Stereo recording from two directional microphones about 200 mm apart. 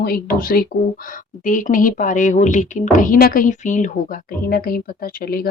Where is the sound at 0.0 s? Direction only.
50° left (ahead or behind).